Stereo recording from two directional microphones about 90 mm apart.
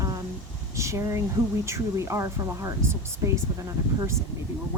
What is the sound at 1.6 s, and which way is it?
Speech, 30° right (ahead or behind).